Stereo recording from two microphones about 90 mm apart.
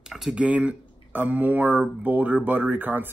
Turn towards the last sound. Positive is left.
turn(degrees=-20)  # may be behind; listen again after turning